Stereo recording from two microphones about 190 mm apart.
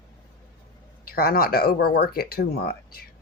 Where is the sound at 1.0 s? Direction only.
50° left (ahead or behind).